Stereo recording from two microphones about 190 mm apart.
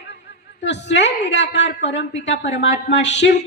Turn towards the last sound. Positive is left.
turn(degrees=65)  # may be behind; listen again after turning